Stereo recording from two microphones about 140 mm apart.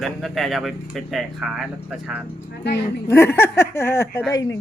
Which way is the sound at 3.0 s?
20° left (ahead or behind).